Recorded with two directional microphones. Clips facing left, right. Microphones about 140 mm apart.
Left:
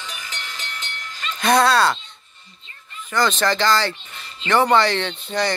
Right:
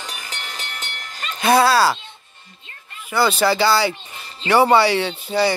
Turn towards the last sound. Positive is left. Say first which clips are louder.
# right 4 dB
turn(degrees=-5)  # may be behind; listen again after turning